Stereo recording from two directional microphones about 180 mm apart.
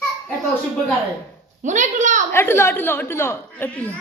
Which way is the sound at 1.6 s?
40° right (ahead or behind).